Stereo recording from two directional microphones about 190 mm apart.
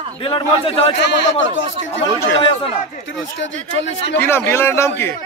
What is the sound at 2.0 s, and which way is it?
Speech, 30° left (ahead or behind).